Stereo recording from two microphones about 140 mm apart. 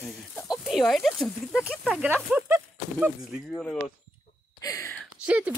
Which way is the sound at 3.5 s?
10° left (ahead or behind).